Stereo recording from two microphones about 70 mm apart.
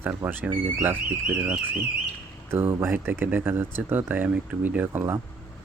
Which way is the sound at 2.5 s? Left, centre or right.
Right.